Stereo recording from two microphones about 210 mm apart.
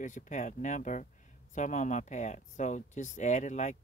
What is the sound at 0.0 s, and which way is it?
Speech, 35° left (ahead or behind).